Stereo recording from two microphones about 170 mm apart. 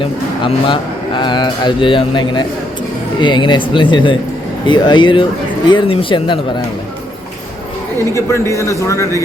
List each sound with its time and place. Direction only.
0.0 s speech: 30° left (ahead or behind)
8.1 s a man's voice: 15° left (ahead or behind)